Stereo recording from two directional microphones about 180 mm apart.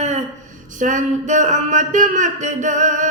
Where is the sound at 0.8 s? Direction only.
45° right (ahead or behind).